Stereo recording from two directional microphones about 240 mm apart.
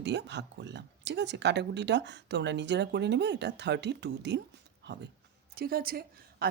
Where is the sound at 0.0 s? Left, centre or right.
Right.